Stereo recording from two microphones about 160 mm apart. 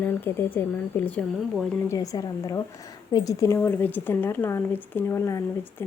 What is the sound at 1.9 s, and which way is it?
A woman's voice, 20° left (ahead or behind).